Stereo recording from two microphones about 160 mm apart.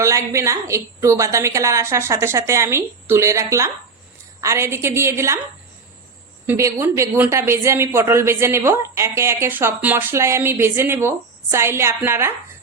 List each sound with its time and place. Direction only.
0.0 s speech: 20° right (ahead or behind)
6.5 s speech: 20° right (ahead or behind)